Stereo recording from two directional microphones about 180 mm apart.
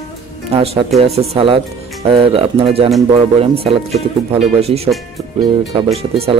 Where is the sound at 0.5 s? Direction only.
30° right (ahead or behind).